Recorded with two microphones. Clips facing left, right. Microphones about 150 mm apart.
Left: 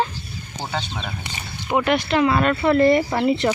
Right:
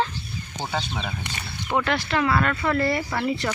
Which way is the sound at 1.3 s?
15° left (ahead or behind).